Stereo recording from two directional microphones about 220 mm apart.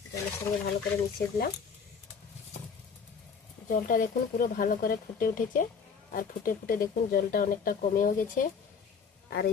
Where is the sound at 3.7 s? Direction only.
40° left (ahead or behind).